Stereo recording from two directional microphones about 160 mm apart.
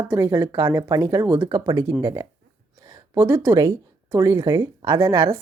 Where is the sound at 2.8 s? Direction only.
20° right (ahead or behind).